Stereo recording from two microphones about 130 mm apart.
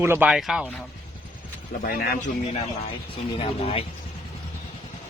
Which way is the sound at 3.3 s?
45° left (ahead or behind).